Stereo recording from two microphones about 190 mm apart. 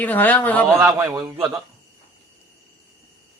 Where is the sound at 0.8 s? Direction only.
15° right (ahead or behind).